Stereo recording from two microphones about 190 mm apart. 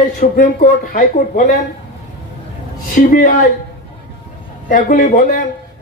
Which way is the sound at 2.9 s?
45° left (ahead or behind).